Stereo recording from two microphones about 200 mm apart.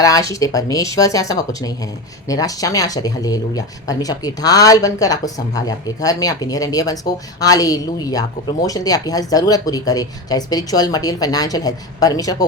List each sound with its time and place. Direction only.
0.0 s speech: 15° left (ahead or behind)